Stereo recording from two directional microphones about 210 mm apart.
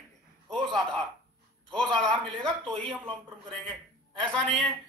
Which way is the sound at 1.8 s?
5° left (ahead or behind).